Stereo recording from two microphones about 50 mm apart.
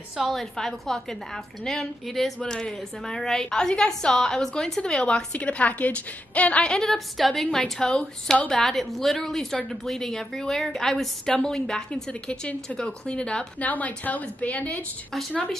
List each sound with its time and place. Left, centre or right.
0.3 s a woman's voice: centre
7.8 s a woman's voice: centre
8.5 s a woman's voice: centre
13.6 s a woman's voice: left